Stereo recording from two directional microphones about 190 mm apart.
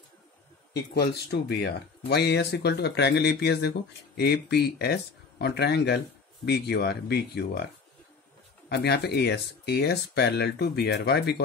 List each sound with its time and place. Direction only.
0.7 s speech: 60° left (ahead or behind)
8.6 s speech: 60° left (ahead or behind)